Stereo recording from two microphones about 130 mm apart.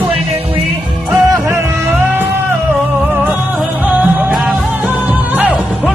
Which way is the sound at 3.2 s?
10° right (ahead or behind).